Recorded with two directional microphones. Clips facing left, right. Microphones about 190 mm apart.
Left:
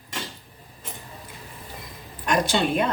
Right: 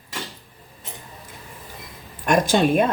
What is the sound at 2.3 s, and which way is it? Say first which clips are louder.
Speech: right 5 dB; 45° right (ahead or behind).